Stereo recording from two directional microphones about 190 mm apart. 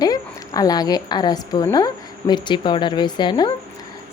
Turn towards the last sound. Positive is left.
turn(degrees=25)  # may be behind; listen again after turning